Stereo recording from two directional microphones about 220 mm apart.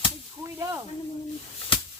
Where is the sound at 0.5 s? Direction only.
15° right (ahead or behind).